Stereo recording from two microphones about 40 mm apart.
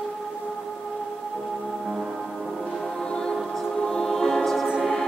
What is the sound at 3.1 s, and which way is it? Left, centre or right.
Music, centre.